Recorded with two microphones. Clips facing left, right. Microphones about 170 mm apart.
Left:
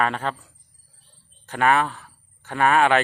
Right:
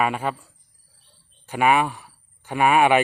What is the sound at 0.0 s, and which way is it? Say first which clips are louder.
Speech: right 1 dB; 10° right (ahead or behind).